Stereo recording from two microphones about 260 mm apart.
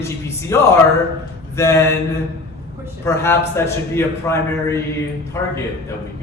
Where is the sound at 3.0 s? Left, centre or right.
Centre.